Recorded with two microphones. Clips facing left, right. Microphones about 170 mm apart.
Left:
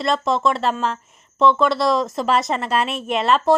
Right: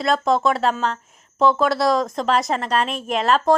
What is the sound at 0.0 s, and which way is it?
A woman's voice, centre (ahead or behind).